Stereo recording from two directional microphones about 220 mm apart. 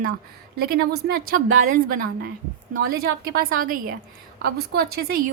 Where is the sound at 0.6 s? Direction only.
45° right (ahead or behind).